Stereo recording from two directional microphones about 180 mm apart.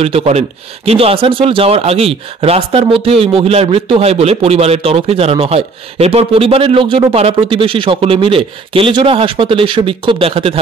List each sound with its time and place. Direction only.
0.0 s speech: 35° right (ahead or behind)